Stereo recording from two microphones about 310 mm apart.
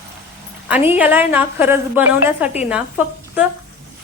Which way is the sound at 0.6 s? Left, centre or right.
Centre.